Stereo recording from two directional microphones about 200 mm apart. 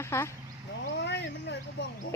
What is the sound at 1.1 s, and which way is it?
Dog, 60° left (ahead or behind).